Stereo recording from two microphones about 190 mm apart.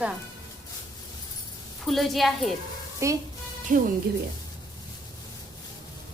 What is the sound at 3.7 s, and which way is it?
Speech, 45° right (ahead or behind).